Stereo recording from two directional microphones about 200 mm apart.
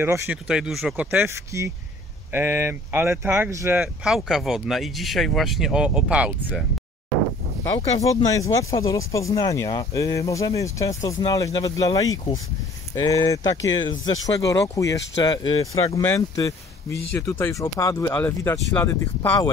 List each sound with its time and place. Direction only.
0.0 s speech: 10° right (ahead or behind)
8.0 s speech: 15° left (ahead or behind)